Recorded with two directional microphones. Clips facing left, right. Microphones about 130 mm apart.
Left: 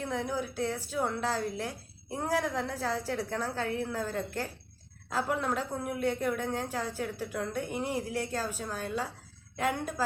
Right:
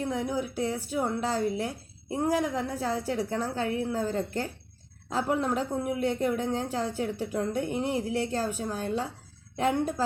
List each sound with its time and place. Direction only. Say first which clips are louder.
0.1 s a woman's voice: right 3 dB; 15° right (ahead or behind)